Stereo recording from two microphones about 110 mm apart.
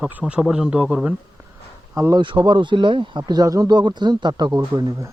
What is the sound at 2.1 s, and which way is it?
Speech, 45° right (ahead or behind).